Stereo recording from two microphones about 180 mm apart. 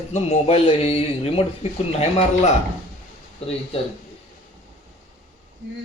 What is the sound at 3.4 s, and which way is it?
Speech, 35° left (ahead or behind).